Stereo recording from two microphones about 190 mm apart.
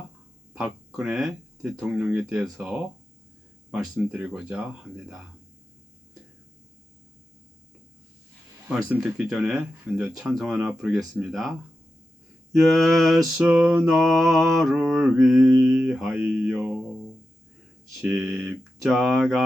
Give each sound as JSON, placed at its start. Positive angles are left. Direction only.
{"t": 0.5, "sound": "mantra", "side_deg": -5}
{"t": 8.6, "sound": "mantra", "side_deg": -5}
{"t": 12.5, "sound": "mantra", "side_deg": 0}
{"t": 18.0, "sound": "mantra", "side_deg": 0}